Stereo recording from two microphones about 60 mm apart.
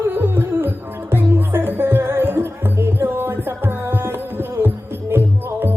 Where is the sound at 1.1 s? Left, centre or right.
Right.